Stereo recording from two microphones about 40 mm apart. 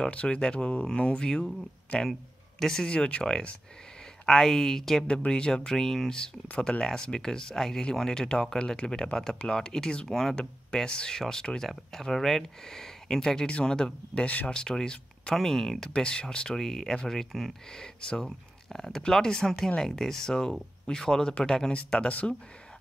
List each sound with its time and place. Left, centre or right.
0.1 s speech: left; by 2.9 s centre
2.9 s speech: left
4.3 s speech: centre
5.0 s speech: left
5.7 s speech: centre
14.2 s speech: left
14.5 s speech: centre
15.9 s speech: left
16.6 s speech: centre
21.7 s speech: left